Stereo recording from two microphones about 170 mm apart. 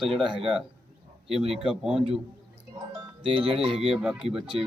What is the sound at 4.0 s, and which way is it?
Speech, 5° right (ahead or behind).